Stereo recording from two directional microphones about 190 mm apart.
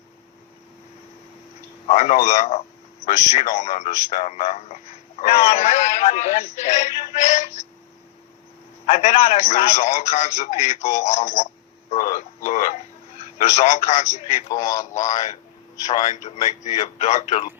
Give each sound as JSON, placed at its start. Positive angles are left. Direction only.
{"t": 1.9, "sound": "a man's voice", "side_deg": 35}
{"t": 8.9, "sound": "a man's voice", "side_deg": 35}
{"t": 14.5, "sound": "a man's voice", "side_deg": 20}
{"t": 14.9, "sound": "a man's voice", "side_deg": 40}